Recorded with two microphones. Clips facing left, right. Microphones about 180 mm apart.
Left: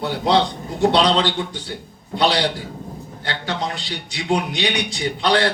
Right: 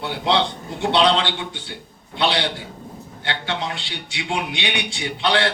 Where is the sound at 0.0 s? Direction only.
40° left (ahead or behind).